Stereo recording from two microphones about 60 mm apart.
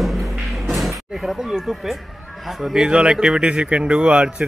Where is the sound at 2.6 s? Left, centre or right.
Centre.